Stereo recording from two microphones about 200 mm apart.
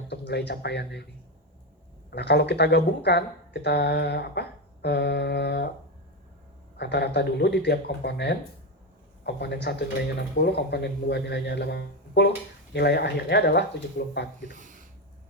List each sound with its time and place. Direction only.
0.1 s speech: 60° left (ahead or behind)
2.0 s speech: 55° left (ahead or behind)
6.7 s speech: 55° left (ahead or behind)
14.5 s a sound: 40° right (ahead or behind)